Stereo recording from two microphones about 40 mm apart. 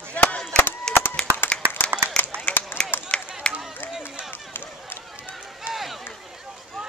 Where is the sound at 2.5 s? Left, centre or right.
Left.